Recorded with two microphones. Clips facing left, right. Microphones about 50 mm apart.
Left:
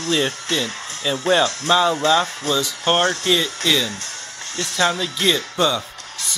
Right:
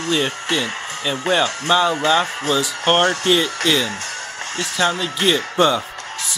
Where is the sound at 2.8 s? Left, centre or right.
Right.